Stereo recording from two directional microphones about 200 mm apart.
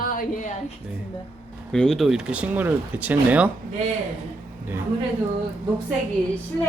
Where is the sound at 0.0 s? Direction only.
45° left (ahead or behind).